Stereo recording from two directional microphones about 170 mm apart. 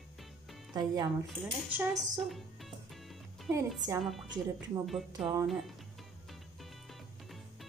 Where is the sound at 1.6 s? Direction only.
10° right (ahead or behind).